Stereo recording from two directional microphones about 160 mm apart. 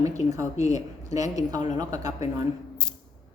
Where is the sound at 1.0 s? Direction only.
20° right (ahead or behind).